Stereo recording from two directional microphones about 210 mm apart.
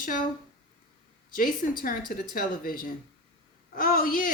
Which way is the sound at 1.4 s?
40° left (ahead or behind).